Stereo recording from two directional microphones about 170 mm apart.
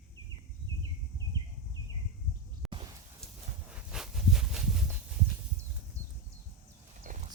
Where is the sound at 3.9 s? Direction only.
5° right (ahead or behind).